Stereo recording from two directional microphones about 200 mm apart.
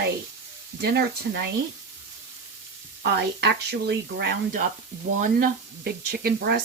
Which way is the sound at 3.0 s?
55° right (ahead or behind).